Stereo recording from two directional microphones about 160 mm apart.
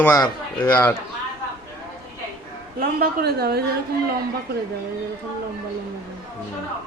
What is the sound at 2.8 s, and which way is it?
Speech, 75° right (ahead or behind).